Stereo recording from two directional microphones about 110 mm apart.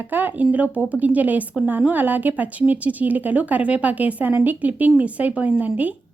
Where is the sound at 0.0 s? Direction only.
15° right (ahead or behind).